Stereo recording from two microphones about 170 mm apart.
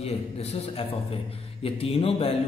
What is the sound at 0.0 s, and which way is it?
A man's voice, 40° left (ahead or behind).